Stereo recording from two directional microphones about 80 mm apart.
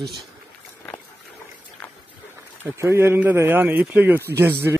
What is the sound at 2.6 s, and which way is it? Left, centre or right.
Speech, right.